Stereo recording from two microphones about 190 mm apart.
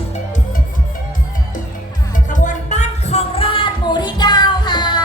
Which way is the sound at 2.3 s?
40° left (ahead or behind).